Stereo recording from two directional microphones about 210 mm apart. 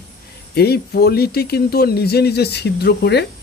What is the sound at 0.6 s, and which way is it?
Speech, 50° left (ahead or behind).